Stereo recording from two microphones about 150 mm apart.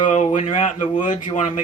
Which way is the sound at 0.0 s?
55° left (ahead or behind).